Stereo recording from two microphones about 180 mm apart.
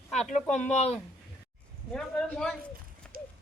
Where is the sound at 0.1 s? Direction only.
40° left (ahead or behind).